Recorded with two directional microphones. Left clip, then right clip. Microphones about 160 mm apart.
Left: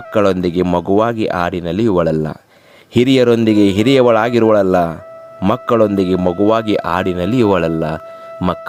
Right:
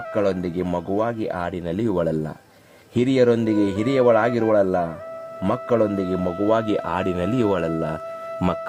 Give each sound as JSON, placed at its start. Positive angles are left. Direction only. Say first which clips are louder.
{"t": 0.1, "sound": "speech", "louder": "left 9 dB", "side_deg": 40}
{"t": 8.4, "sound": "speech", "louder": "left 6 dB", "side_deg": 10}